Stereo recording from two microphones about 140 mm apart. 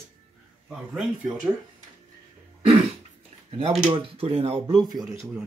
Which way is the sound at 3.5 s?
45° right (ahead or behind).